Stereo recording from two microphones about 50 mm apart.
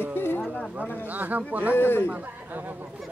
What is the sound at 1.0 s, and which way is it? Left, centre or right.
Speech, right.